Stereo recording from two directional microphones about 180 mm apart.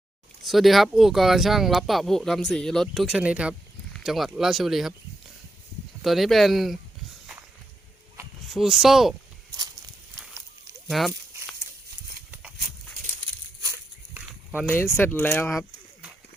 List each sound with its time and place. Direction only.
0.4 s speech: centre (ahead or behind)
6.0 s speech: centre (ahead or behind)
8.4 s speech: centre (ahead or behind)
9.5 s walk: 20° right (ahead or behind)
10.8 s speech: centre (ahead or behind)
12.3 s a sound: 5° right (ahead or behind)
13.6 s a sound: 15° right (ahead or behind)
14.7 s speech: 15° left (ahead or behind); by 16.1 s centre (ahead or behind)